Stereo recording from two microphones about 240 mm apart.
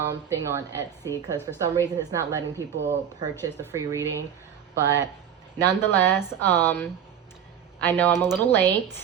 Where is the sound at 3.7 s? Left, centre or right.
Centre.